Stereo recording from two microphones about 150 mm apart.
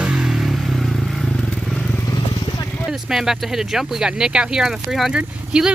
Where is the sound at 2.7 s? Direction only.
Centre (ahead or behind).